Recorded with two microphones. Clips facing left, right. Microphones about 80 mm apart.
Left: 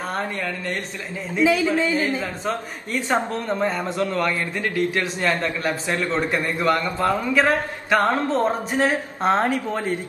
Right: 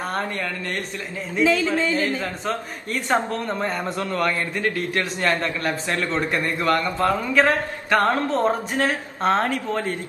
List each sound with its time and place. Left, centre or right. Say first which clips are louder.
1.4 s a man's voice: left 1 dB; centre
9.2 s a man's voice: even; centre